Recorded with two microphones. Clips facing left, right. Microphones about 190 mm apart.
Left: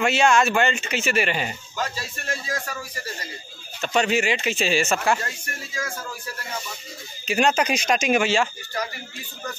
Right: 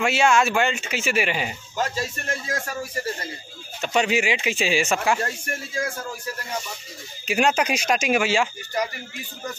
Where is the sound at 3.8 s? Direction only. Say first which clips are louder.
Even; 10° right (ahead or behind).